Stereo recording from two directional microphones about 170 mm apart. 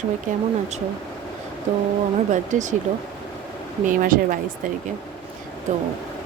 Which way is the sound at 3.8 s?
55° right (ahead or behind).